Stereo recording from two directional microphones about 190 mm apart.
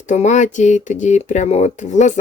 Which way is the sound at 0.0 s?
40° left (ahead or behind).